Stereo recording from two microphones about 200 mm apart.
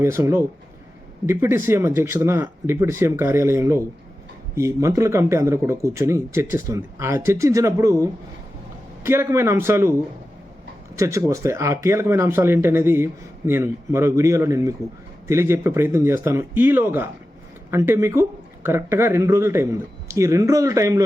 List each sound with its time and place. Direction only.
0.0 s speech: 15° right (ahead or behind)
10.9 s speech: 15° right (ahead or behind)